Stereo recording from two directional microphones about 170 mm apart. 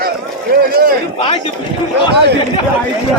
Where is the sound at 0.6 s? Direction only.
60° right (ahead or behind).